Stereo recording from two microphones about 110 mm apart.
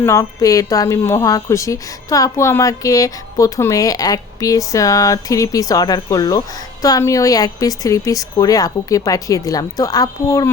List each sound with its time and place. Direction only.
0.0 s a woman's voice: 30° left (ahead or behind)